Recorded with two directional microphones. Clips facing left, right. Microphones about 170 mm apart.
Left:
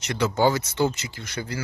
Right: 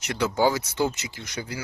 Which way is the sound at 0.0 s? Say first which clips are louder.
Left 1 dB; 5° right (ahead or behind).